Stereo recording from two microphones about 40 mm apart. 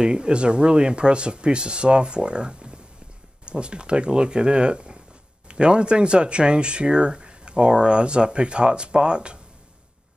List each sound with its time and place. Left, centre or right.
0.0 s speech: right